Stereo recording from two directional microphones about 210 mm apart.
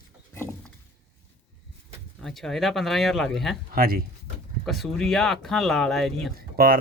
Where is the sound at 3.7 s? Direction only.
45° right (ahead or behind).